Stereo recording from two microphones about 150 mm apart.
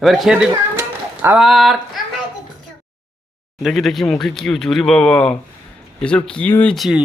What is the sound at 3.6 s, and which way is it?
Speech, centre (ahead or behind).